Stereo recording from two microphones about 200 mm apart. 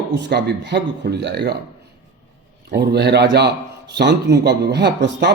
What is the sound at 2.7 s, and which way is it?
A man's voice, 55° right (ahead or behind).